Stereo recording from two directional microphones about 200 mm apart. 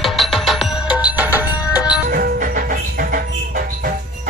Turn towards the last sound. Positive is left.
turn(degrees=-45)  # may be behind; listen again after turning